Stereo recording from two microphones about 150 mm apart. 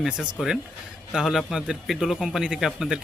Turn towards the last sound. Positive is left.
turn(degrees=0)  # may be behind; listen again after turning